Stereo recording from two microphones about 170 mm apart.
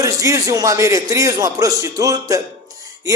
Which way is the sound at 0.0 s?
20° right (ahead or behind).